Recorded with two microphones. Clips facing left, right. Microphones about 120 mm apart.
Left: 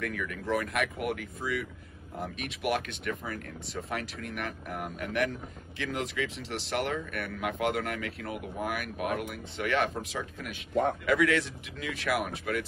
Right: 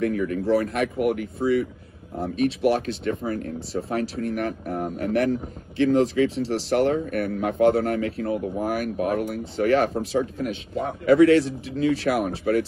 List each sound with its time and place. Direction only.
0.0 s speech: 35° right (ahead or behind)